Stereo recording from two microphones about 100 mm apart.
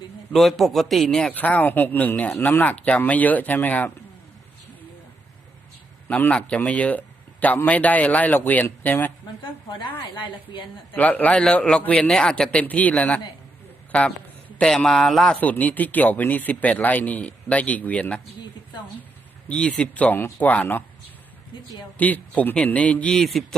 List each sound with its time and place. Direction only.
0.3 s a man's voice: centre (ahead or behind); by 3.9 s 15° left (ahead or behind)
6.1 s speech: 15° left (ahead or behind)
9.4 s a woman's voice: 50° left (ahead or behind)
10.9 s a man's voice: 15° left (ahead or behind)
15.4 s speech: 15° left (ahead or behind)
19.5 s speech: 10° left (ahead or behind)
21.9 s speech: 15° left (ahead or behind)